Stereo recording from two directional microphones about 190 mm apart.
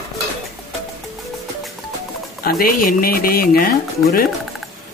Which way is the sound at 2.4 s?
50° left (ahead or behind).